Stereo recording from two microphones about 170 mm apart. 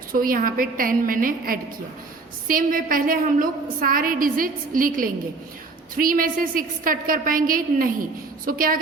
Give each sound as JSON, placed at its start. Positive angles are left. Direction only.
{"t": 0.1, "sound": "a woman's voice", "side_deg": -55}